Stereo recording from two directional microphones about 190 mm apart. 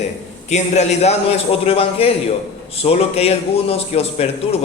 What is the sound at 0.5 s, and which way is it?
A man's voice, 35° left (ahead or behind).